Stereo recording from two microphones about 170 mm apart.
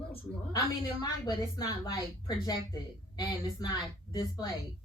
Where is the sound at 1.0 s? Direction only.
25° left (ahead or behind).